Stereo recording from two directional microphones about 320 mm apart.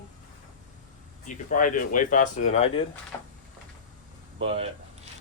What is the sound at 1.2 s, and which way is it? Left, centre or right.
Speech, left.